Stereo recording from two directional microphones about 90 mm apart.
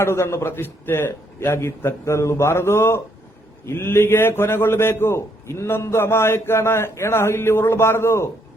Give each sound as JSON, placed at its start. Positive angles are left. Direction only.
{"t": 0.0, "sound": "a man's voice", "side_deg": 30}